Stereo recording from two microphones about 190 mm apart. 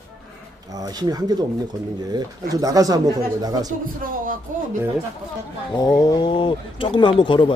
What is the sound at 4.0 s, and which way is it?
Speech, 45° right (ahead or behind).